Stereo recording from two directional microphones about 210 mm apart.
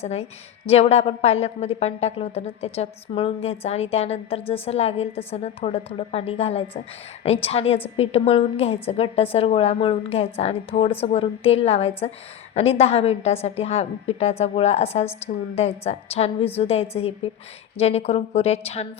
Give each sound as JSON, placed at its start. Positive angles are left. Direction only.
{"t": 0.0, "sound": "a woman's voice", "side_deg": 30}